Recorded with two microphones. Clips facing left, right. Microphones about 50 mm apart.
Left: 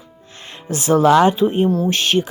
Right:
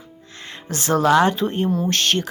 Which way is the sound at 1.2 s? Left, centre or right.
Centre.